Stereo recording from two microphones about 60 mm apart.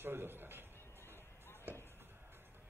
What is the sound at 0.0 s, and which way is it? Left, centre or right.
Music, right.